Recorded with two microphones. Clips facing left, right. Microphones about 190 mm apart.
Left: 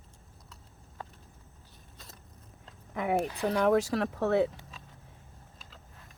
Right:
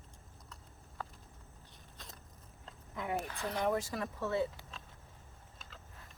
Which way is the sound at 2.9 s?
70° left (ahead or behind).